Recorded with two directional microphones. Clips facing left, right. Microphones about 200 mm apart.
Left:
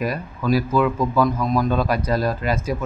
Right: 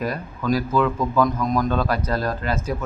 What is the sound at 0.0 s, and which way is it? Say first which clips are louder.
Speech: left 2 dB; 10° left (ahead or behind).